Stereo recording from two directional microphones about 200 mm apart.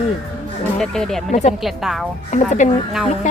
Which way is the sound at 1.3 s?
35° left (ahead or behind).